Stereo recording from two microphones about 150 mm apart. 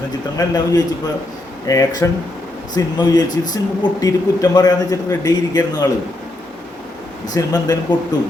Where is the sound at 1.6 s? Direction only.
25° left (ahead or behind).